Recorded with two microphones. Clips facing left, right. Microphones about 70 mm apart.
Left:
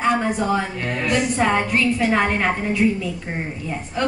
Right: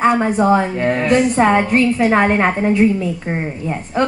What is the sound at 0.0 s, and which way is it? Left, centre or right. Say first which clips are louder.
A woman's voice: right 6 dB; right.